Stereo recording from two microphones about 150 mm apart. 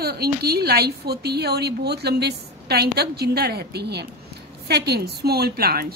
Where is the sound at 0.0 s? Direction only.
90° right.